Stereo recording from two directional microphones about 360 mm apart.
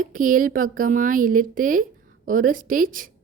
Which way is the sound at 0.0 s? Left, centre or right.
Right.